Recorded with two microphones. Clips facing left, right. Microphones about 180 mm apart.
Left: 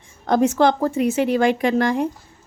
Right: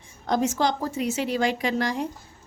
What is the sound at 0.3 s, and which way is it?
A woman's voice, 60° left (ahead or behind).